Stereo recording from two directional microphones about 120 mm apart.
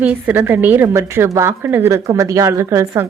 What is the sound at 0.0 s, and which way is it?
A woman's voice, 15° right (ahead or behind).